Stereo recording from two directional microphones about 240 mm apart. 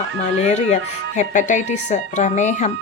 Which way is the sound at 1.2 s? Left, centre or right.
Left.